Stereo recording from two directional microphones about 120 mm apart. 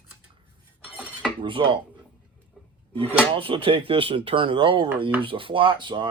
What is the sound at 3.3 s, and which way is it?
Speech, 50° right (ahead or behind).